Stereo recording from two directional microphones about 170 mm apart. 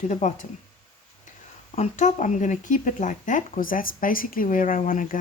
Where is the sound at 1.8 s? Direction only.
45° left (ahead or behind).